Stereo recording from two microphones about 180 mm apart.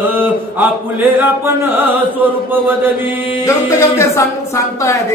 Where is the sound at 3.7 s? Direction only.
15° left (ahead or behind).